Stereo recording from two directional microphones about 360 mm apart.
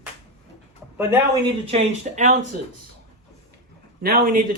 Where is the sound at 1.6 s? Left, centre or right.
Centre.